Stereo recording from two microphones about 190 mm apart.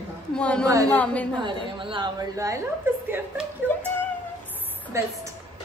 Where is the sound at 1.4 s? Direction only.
25° right (ahead or behind).